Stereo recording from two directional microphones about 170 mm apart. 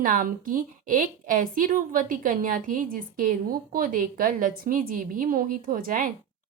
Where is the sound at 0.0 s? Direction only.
55° right (ahead or behind).